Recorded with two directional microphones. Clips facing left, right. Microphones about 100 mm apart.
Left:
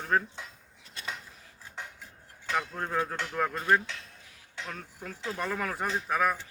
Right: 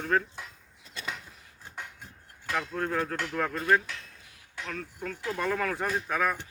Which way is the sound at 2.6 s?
15° left (ahead or behind).